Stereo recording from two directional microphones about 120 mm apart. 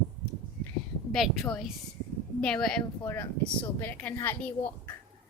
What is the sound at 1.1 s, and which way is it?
Speech, 5° left (ahead or behind).